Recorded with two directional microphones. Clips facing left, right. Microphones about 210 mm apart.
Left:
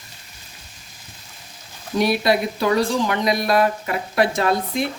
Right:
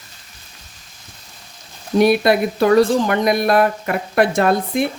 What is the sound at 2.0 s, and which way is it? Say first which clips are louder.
Speech: right 5 dB; 55° right (ahead or behind).